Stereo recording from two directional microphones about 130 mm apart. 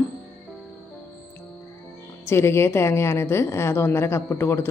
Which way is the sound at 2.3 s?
20° left (ahead or behind).